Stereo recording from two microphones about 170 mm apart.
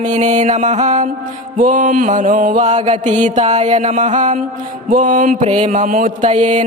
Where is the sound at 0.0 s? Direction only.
45° right (ahead or behind).